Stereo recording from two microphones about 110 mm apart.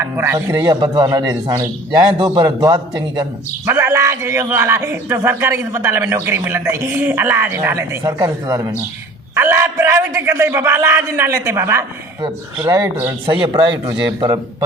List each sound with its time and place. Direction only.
0.0 s a man's voice: 25° right (ahead or behind)
2.1 s a man's voice: 55° right (ahead or behind)
2.4 s speech: 35° right (ahead or behind)
3.7 s a man's voice: 25° right (ahead or behind)
8.0 s speech: 30° right (ahead or behind)
9.3 s a man's voice: 20° right (ahead or behind)
13.2 s speech: 45° right (ahead or behind)